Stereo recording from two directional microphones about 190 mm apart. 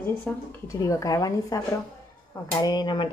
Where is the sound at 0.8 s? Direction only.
20° left (ahead or behind).